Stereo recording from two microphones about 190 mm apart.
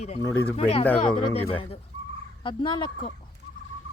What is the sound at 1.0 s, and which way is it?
Speech, 30° left (ahead or behind).